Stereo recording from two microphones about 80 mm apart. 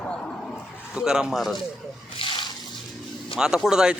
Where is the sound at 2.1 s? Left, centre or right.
Left.